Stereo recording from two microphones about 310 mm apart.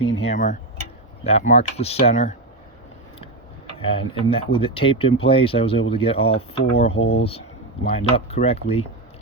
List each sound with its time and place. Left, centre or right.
0.0 s speech: left
3.8 s speech: centre